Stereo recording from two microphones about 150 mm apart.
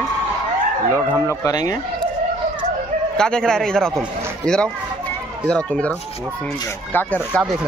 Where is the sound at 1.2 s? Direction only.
25° left (ahead or behind).